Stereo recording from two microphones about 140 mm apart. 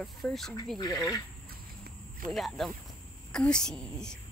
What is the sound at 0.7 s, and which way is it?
Speech, 30° left (ahead or behind).